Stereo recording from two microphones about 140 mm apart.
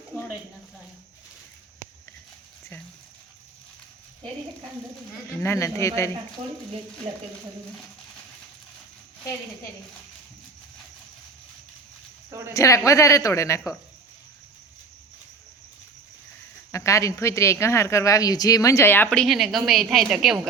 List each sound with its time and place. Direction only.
5.4 s speech: 20° left (ahead or behind)
12.5 s speech: 20° left (ahead or behind)
16.7 s speech: 20° left (ahead or behind)
19.2 s a woman's voice: centre (ahead or behind)